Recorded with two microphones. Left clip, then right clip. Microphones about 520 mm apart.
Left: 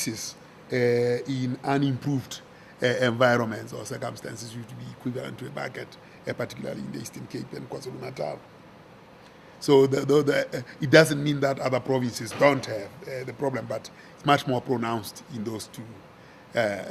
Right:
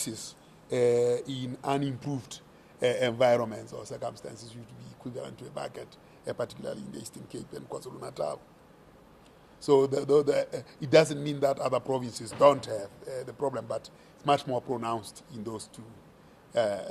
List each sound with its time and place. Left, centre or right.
0.7 s speech: right
2.8 s a man's voice: right
9.6 s a man's voice: right